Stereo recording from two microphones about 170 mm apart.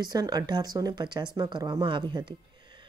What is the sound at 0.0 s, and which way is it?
Speech, 25° right (ahead or behind).